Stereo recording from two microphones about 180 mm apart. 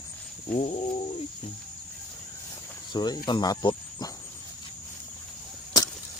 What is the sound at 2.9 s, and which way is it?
Cricket, 25° left (ahead or behind).